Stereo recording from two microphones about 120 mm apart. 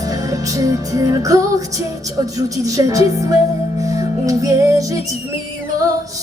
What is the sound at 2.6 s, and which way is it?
Music, 30° right (ahead or behind).